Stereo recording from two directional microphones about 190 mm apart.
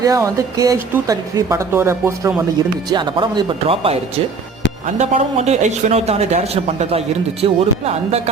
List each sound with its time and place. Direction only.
0.0 s a woman's voice: 20° right (ahead or behind)
2.9 s speech: 25° right (ahead or behind)
4.9 s a man's voice: 35° right (ahead or behind)